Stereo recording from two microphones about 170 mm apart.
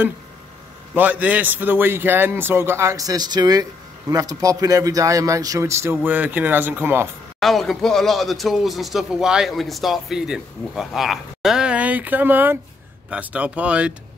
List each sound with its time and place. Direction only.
0.9 s speech: 10° right (ahead or behind)
7.3 s speech: centre (ahead or behind)